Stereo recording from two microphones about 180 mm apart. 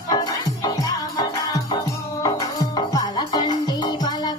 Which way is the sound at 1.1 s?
20° left (ahead or behind).